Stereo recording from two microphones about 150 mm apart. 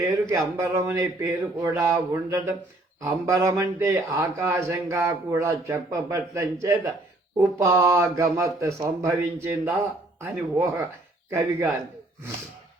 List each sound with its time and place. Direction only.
0.0 s a man's voice: 20° right (ahead or behind)